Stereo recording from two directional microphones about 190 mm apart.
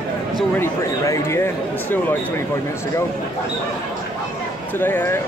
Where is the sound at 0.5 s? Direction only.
15° left (ahead or behind).